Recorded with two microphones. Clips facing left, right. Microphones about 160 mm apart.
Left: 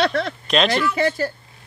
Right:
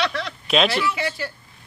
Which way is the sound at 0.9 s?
55° left (ahead or behind).